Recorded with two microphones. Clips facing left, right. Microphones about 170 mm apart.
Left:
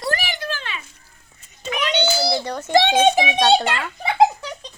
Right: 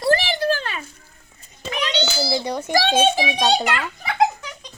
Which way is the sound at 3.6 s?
30° left (ahead or behind).